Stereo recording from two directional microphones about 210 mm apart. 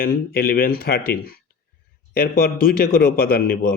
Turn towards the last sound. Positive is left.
turn(degrees=45)  # may be behind; listen again after turning